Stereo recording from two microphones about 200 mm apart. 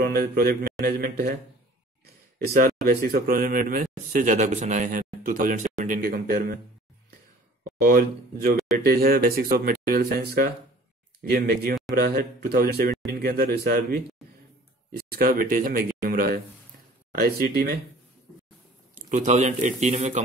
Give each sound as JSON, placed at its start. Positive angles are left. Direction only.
{"t": 0.0, "sound": "speech", "side_deg": -50}
{"t": 2.5, "sound": "speech", "side_deg": -50}
{"t": 7.8, "sound": "speech", "side_deg": -45}
{"t": 18.9, "sound": "speech", "side_deg": -40}